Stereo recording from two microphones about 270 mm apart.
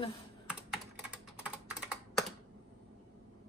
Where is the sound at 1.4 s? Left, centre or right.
Centre.